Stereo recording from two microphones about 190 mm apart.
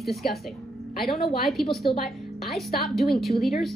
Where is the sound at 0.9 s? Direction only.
55° left (ahead or behind).